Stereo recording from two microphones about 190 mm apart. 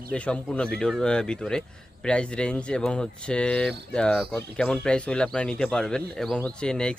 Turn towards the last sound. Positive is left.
turn(degrees=5)  # may be behind; listen again after turning